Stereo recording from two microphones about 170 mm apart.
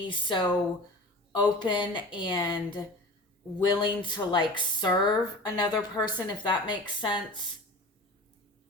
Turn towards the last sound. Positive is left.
turn(degrees=25)  # may be behind; listen again after turning